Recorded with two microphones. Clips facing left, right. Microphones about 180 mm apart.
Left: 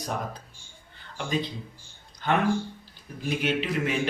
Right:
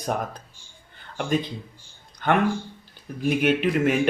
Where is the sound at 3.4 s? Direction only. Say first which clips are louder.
Right 6 dB; 55° right (ahead or behind).